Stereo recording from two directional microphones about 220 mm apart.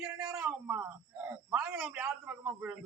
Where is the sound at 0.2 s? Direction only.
5° right (ahead or behind).